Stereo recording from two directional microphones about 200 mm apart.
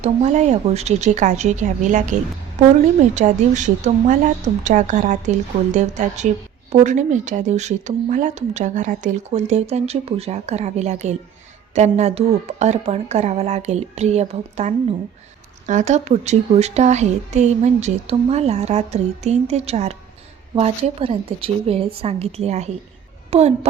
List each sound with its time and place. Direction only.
0.0 s speech: 35° right (ahead or behind)